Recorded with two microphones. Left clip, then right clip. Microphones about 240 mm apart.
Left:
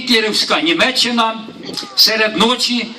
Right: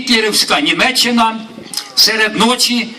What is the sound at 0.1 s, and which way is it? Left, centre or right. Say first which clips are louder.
A man's voice: right 2 dB; right.